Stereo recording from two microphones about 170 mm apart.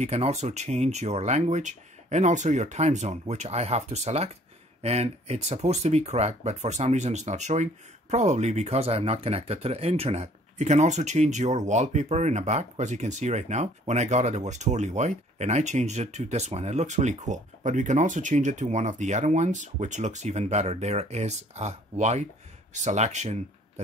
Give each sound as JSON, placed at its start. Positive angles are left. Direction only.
{"t": 0.0, "sound": "speech", "side_deg": -40}